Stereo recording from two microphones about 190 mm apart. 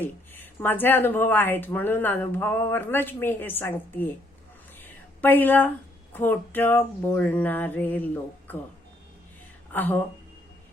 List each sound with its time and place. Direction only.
0.0 s speech: 10° left (ahead or behind)
4.8 s a sound: 10° left (ahead or behind)
6.1 s speech: 10° left (ahead or behind)
9.7 s speech: 10° left (ahead or behind)